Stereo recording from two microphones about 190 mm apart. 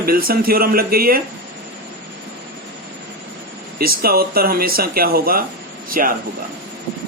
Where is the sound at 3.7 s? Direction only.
50° right (ahead or behind).